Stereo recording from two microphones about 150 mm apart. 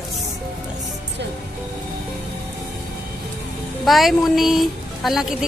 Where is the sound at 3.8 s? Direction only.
Centre (ahead or behind).